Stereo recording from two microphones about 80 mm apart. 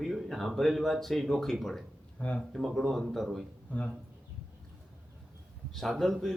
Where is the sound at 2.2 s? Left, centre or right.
Centre.